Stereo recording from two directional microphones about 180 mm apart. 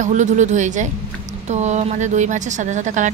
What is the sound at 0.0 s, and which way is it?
A woman's voice, 45° right (ahead or behind).